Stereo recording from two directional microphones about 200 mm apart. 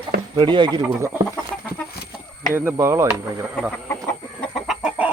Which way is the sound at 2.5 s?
10° right (ahead or behind).